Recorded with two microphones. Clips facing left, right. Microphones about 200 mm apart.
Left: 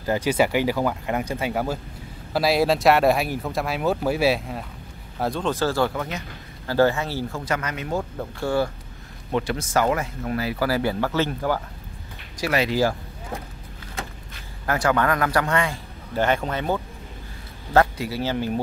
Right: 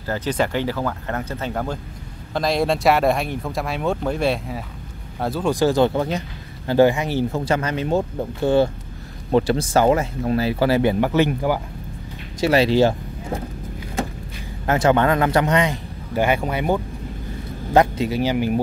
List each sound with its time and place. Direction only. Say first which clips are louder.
0.0 s speech: left 2 dB; 15° left (ahead or behind); by 6.2 s 30° right (ahead or behind)
6.7 s speech: right 4 dB; 15° right (ahead or behind)
9.3 s speech: right 6 dB; 30° right (ahead or behind); by 11.6 s 15° right (ahead or behind)
12.4 s speech: right 6 dB; 30° right (ahead or behind)
14.7 s speech: right 4 dB; 25° right (ahead or behind)